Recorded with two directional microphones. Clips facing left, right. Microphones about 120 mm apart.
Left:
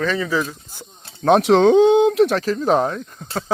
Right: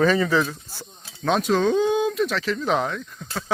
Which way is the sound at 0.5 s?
15° left (ahead or behind).